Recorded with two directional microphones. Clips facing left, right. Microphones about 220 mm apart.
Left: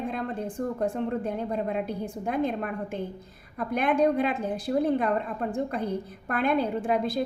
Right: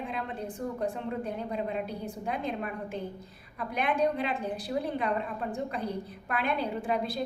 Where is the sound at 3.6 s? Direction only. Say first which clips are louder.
Left 5 dB; 45° left (ahead or behind).